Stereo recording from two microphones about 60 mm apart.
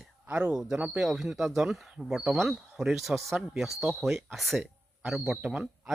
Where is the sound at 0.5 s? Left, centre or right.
Centre.